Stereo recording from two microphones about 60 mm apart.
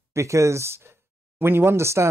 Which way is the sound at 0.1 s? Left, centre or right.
Right.